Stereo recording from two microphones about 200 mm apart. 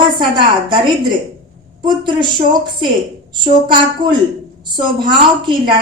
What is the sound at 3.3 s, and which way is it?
Speech, 25° right (ahead or behind).